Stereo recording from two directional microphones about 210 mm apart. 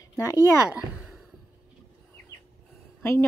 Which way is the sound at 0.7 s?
Centre (ahead or behind).